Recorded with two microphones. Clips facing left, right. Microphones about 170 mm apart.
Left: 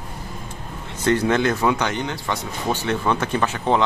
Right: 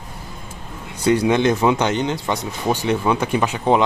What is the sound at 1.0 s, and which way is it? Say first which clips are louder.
Speech: right 3 dB; 10° right (ahead or behind).